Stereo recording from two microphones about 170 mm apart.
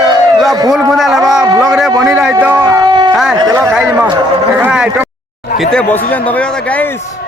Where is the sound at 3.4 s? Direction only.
20° right (ahead or behind).